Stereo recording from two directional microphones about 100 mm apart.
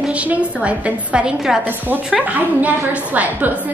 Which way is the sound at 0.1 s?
15° right (ahead or behind).